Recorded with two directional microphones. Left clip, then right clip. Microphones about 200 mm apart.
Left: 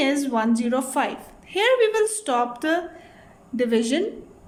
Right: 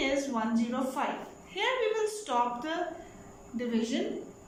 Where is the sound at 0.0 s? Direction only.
55° left (ahead or behind).